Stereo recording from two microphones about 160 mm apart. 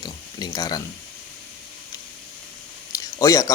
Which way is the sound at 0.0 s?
25° left (ahead or behind).